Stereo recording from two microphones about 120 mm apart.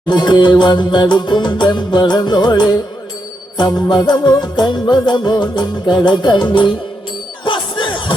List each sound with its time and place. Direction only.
0.1 s music: 40° left (ahead or behind)
3.8 s music: 35° left (ahead or behind)
7.4 s crowd: 40° left (ahead or behind)